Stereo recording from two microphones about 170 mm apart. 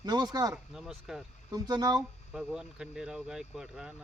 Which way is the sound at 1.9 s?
Centre (ahead or behind).